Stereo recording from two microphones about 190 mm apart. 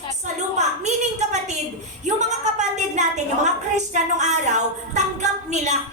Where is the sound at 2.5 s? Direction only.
40° right (ahead or behind).